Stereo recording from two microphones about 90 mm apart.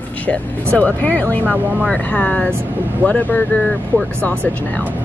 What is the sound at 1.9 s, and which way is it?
Speech, 15° left (ahead or behind).